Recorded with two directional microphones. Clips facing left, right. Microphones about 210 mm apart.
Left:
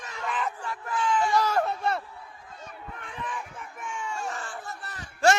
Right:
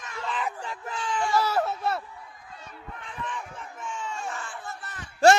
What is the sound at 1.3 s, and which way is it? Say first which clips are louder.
Speech: even; 5° right (ahead or behind).